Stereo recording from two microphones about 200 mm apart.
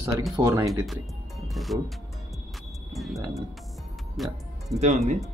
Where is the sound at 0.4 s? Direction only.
15° right (ahead or behind).